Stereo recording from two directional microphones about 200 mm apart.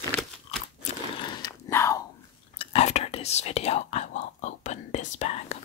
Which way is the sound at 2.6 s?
30° left (ahead or behind).